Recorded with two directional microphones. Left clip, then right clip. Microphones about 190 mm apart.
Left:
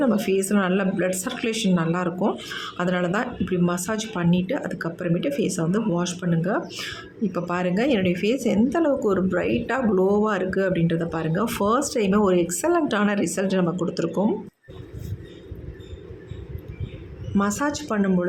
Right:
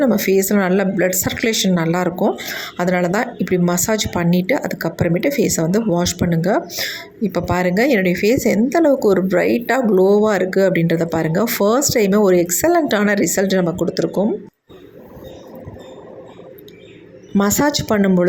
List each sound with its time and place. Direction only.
0.0 s a woman's voice: 20° right (ahead or behind)
17.3 s a woman's voice: 25° right (ahead or behind)